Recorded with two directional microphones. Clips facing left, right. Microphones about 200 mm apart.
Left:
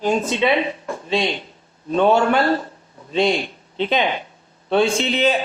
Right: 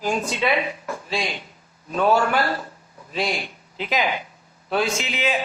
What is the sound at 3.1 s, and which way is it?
A man's voice, 25° left (ahead or behind).